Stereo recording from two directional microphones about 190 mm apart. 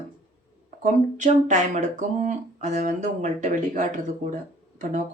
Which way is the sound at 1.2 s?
40° right (ahead or behind).